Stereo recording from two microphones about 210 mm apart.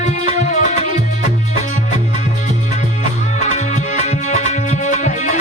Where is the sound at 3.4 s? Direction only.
35° left (ahead or behind).